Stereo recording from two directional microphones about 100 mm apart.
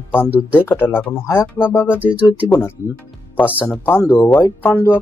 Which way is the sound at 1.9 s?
15° right (ahead or behind).